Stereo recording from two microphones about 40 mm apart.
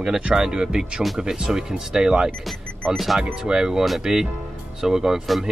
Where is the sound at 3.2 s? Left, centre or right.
Centre.